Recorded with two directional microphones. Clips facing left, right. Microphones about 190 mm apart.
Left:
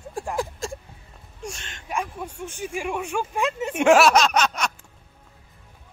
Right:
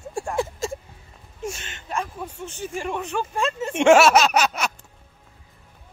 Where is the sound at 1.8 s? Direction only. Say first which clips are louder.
Even; 10° left (ahead or behind).